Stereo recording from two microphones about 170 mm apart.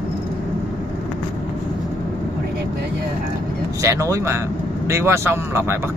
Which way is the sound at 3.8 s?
20° right (ahead or behind).